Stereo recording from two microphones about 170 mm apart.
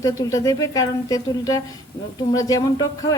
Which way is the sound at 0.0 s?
20° left (ahead or behind).